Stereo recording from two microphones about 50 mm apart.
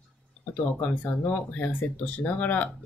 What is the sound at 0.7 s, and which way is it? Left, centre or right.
Speech, left.